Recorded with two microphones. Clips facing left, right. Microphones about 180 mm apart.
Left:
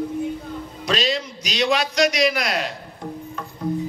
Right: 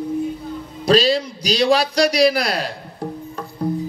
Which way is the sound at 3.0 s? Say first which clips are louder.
Right 4 dB; 35° right (ahead or behind).